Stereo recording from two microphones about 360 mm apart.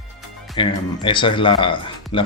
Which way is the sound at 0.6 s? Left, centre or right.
Centre.